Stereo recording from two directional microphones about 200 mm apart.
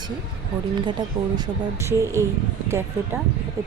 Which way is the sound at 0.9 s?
20° right (ahead or behind).